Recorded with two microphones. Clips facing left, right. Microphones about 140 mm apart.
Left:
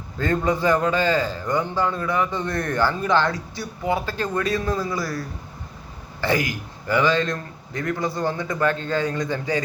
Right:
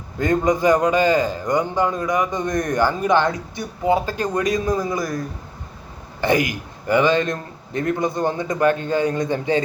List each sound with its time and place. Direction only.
0.2 s a man's voice: 15° right (ahead or behind)
6.2 s a man's voice: 20° right (ahead or behind)